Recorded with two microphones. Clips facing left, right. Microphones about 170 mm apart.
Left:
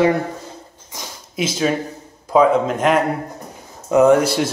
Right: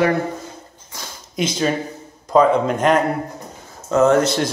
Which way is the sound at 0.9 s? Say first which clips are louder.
Left 2 dB; 15° left (ahead or behind).